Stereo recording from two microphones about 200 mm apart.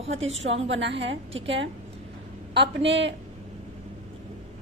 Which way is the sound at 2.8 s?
65° right (ahead or behind).